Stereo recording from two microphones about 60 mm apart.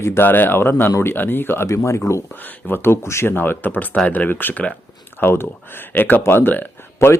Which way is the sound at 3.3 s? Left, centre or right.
Left.